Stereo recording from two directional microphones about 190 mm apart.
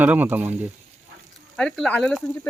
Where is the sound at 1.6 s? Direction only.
5° left (ahead or behind).